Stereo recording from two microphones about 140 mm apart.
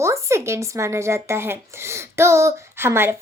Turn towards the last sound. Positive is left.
turn(degrees=-15)  # may be behind; listen again after turning